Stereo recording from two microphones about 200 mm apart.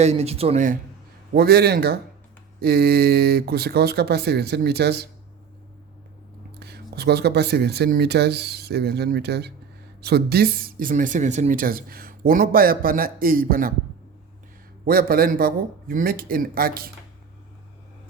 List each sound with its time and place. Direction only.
0.0 s speech: 30° right (ahead or behind)
1.3 s speech: 50° right (ahead or behind)
6.6 s speech: 55° right (ahead or behind)
14.8 s speech: 50° right (ahead or behind)